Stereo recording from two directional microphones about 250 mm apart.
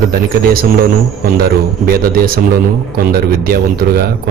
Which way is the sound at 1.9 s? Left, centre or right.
Right.